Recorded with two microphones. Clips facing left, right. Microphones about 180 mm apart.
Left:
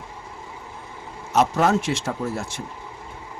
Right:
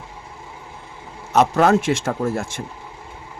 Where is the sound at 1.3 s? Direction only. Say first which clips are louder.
Right 4 dB; 60° right (ahead or behind).